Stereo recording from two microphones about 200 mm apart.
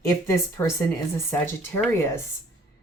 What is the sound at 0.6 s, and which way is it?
Speech, 10° left (ahead or behind).